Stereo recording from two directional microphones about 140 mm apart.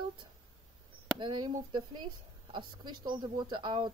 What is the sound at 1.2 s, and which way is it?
Speech, 35° right (ahead or behind).